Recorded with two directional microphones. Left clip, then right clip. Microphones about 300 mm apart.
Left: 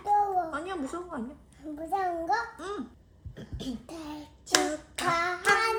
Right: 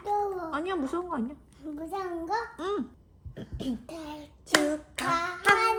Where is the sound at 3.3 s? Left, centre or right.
Right.